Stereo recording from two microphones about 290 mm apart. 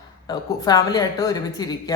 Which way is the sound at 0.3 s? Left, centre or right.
Centre.